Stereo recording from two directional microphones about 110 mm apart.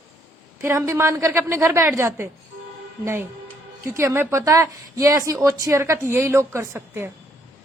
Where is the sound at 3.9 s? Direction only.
25° right (ahead or behind).